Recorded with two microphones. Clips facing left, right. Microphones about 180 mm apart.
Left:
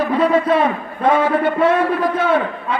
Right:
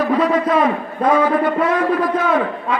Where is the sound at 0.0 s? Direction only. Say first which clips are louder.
Even; 30° left (ahead or behind).